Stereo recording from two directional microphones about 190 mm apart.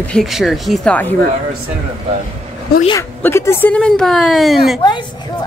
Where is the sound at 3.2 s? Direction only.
15° left (ahead or behind).